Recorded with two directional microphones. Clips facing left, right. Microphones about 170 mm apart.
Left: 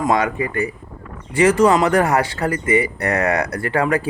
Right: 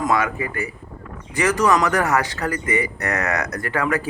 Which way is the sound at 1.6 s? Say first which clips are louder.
Left 4 dB; 30° left (ahead or behind).